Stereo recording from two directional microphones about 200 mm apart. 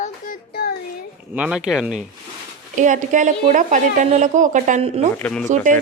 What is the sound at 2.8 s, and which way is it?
A woman's voice, 40° right (ahead or behind).